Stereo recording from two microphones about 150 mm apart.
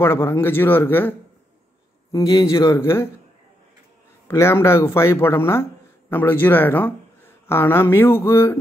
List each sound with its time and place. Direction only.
0.0 s speech: 15° left (ahead or behind)
2.5 s speech: 20° left (ahead or behind)
4.3 s speech: 15° left (ahead or behind)